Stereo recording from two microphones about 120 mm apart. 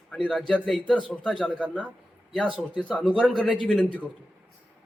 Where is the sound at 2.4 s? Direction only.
5° right (ahead or behind); by 4.1 s 10° left (ahead or behind).